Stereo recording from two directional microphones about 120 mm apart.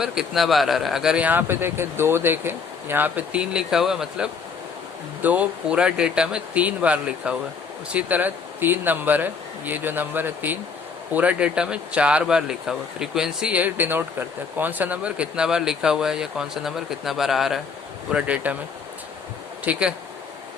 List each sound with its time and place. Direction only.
0.0 s speech: 5° right (ahead or behind)
19.7 s speech: 10° right (ahead or behind)